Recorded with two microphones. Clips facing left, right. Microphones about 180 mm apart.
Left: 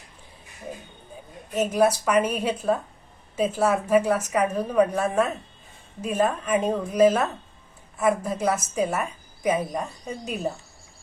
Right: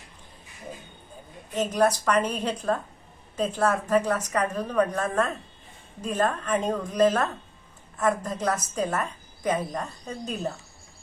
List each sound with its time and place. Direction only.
1.5 s a woman's voice: 10° left (ahead or behind)